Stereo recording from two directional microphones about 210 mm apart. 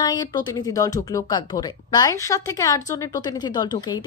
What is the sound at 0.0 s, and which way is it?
A woman's voice, 20° left (ahead or behind).